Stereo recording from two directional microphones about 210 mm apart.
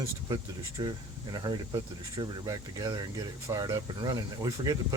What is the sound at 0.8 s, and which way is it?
Speech, 20° right (ahead or behind).